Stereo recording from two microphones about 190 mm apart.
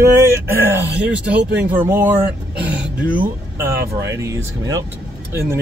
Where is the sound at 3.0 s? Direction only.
45° right (ahead or behind).